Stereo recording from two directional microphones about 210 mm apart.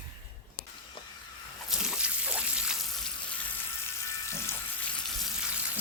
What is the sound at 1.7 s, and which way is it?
Water, 5° right (ahead or behind).